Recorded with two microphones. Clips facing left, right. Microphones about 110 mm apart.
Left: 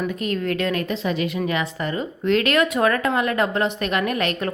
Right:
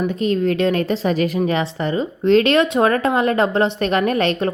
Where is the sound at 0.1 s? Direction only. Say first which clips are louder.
Right 6 dB; 25° right (ahead or behind).